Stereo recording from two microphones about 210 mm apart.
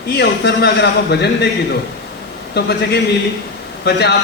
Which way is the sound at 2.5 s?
55° left (ahead or behind).